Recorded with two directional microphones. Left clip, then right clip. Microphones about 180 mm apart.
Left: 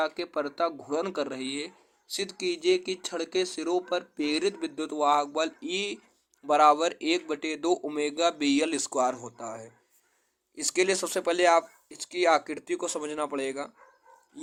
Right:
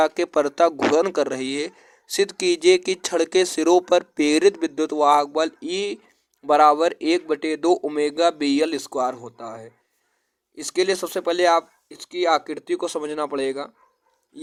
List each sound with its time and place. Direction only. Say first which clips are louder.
0.0 s speech: right 10 dB; 40° right (ahead or behind)